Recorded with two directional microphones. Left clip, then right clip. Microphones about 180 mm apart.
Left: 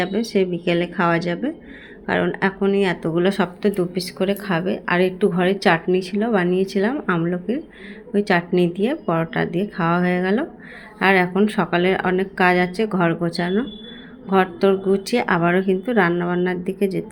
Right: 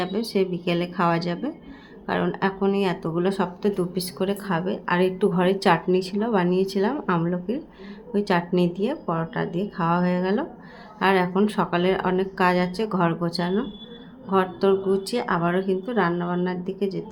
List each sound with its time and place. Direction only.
0.0 s a woman's voice: 5° left (ahead or behind)